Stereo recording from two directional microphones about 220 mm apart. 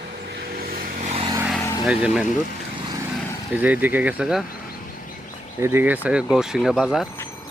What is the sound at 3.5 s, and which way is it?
Speech, 5° right (ahead or behind).